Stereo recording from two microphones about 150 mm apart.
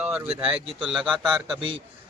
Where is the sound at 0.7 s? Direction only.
Centre (ahead or behind).